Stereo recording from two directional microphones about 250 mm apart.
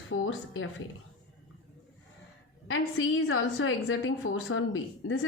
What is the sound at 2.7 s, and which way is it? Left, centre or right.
A woman's voice, left.